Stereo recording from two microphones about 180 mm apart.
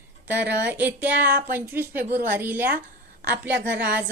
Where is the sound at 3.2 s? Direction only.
65° right (ahead or behind).